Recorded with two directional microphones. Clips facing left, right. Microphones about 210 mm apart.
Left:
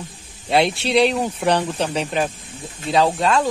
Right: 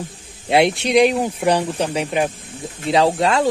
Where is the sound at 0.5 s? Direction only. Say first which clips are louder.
Right 2 dB; 20° right (ahead or behind).